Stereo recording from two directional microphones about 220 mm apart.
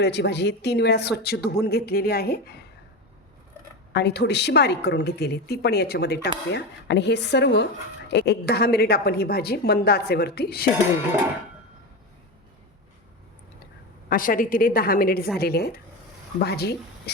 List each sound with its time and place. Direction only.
0.0 s a woman's voice: 50° left (ahead or behind)
3.9 s a woman's voice: 50° left (ahead or behind)
14.1 s a woman's voice: 40° left (ahead or behind)